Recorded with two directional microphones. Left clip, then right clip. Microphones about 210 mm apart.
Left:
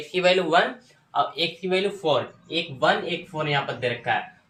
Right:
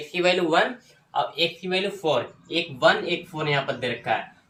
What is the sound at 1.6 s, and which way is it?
Speech, 10° left (ahead or behind).